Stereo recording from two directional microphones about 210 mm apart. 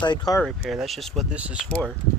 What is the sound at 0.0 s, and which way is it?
Speech, 20° left (ahead or behind).